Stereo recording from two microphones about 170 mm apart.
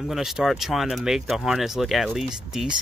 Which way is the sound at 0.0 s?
Centre (ahead or behind).